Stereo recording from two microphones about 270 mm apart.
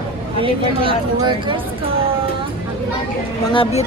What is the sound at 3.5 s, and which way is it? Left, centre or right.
Speech, left.